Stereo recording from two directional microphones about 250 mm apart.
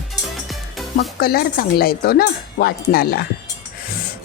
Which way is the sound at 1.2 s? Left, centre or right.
Left.